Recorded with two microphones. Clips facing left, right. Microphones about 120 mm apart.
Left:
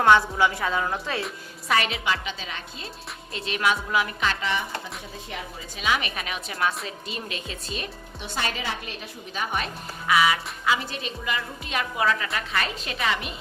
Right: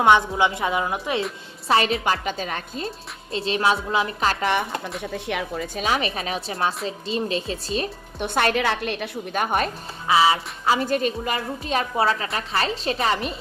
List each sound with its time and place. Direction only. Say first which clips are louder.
0.0 s a woman's voice: right 1 dB; 20° right (ahead or behind)
1.6 s a woman's voice: right 4 dB; 30° right (ahead or behind)
2.2 s speech: right 7 dB; 50° right (ahead or behind)
3.3 s a woman's voice: right 4 dB; 30° right (ahead or behind); by 4.9 s 60° right (ahead or behind)
5.1 s speech: right 12 dB; 70° right (ahead or behind)
5.7 s a woman's voice: right 2 dB; 40° right (ahead or behind)
8.2 s a woman's voice: right 9 dB; 55° right (ahead or behind)
10.1 s a woman's voice: right 3 dB; 30° right (ahead or behind)
10.8 s speech: right 9 dB; 45° right (ahead or behind)
11.3 s a woman's voice: right 5 dB; 35° right (ahead or behind)